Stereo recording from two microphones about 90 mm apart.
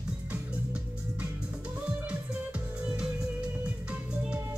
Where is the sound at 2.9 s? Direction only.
10° right (ahead or behind).